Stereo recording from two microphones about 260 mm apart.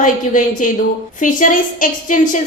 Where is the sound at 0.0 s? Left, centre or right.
Left.